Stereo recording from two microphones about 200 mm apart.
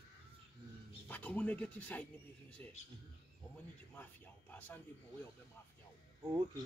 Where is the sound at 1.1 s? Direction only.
10° left (ahead or behind).